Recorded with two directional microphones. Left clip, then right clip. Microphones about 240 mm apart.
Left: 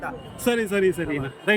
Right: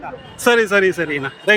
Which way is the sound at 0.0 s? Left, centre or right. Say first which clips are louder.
Right 8 dB; centre.